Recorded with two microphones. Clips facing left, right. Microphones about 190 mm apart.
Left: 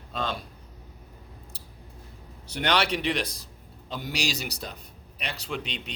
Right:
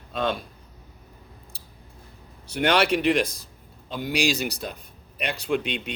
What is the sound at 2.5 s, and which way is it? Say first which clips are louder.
Speech: right 5 dB; 50° right (ahead or behind).